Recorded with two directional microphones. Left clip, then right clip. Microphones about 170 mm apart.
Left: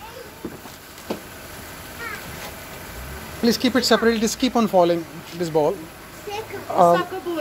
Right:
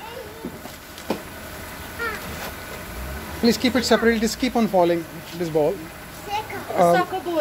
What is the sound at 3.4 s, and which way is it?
Speech, 20° left (ahead or behind).